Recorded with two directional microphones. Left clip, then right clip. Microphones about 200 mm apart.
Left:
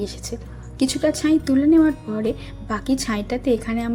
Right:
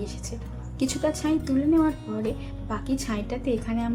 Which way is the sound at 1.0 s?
20° left (ahead or behind).